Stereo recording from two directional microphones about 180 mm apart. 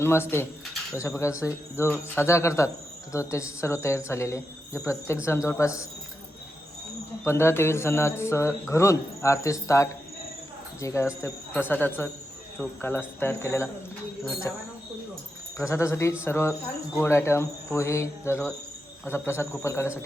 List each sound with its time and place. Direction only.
0.0 s speech: 15° left (ahead or behind)
7.3 s speech: 15° left (ahead or behind)
15.5 s speech: 15° left (ahead or behind)